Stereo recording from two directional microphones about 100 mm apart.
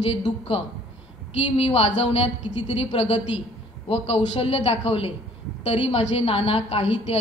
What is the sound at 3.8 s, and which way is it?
A woman's voice, 90° left.